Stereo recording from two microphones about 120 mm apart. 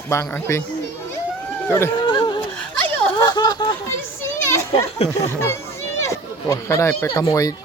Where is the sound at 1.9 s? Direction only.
45° left (ahead or behind).